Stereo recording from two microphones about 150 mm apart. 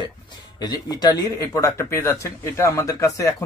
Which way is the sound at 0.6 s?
25° left (ahead or behind).